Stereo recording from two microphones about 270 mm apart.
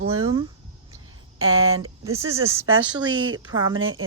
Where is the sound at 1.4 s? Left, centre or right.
Right.